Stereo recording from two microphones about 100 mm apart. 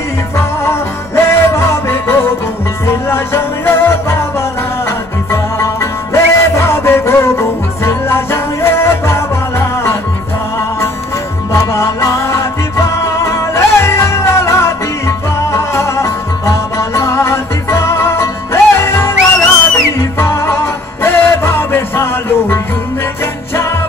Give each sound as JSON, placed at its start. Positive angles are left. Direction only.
{"t": 0.4, "sound": "music", "side_deg": 25}
{"t": 5.3, "sound": "music", "side_deg": 30}
{"t": 11.5, "sound": "music", "side_deg": 30}